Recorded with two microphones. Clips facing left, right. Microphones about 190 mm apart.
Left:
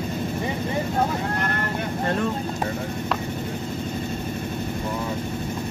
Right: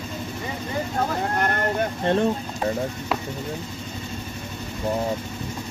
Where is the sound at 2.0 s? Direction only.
30° right (ahead or behind).